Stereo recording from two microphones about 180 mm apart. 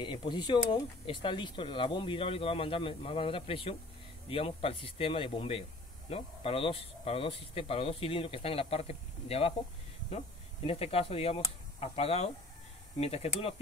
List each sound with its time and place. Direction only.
0.0 s speech: 25° left (ahead or behind)